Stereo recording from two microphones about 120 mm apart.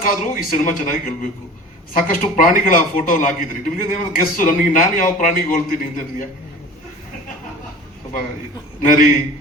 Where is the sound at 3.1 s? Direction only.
90° left.